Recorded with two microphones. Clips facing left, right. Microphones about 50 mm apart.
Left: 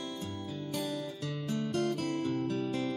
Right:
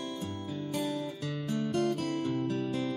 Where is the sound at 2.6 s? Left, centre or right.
Centre.